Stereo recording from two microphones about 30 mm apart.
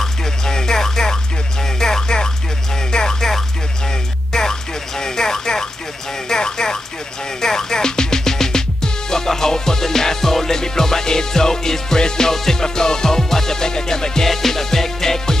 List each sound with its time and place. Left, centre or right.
0.0 s music: centre